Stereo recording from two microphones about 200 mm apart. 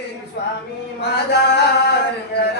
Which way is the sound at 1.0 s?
55° left (ahead or behind).